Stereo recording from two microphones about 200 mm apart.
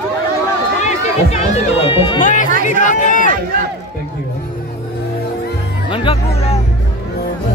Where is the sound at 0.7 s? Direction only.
35° left (ahead or behind).